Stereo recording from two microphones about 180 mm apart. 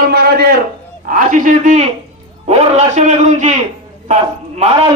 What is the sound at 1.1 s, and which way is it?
A man's voice, 50° right (ahead or behind).